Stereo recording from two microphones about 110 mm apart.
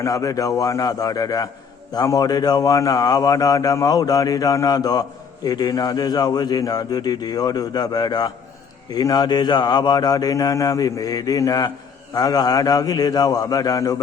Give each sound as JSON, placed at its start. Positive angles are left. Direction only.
{"t": 0.0, "sound": "a man's voice", "side_deg": 35}